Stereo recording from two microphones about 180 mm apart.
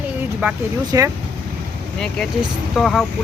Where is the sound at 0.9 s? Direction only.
15° right (ahead or behind).